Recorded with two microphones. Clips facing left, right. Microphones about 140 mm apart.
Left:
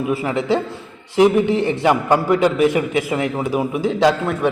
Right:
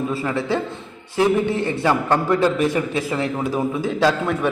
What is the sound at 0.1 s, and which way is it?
A man's voice, 15° left (ahead or behind).